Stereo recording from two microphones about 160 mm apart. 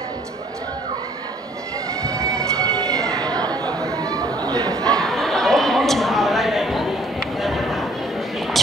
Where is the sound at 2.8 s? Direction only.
5° left (ahead or behind).